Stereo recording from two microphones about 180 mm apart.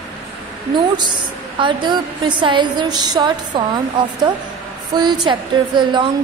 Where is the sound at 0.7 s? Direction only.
25° right (ahead or behind).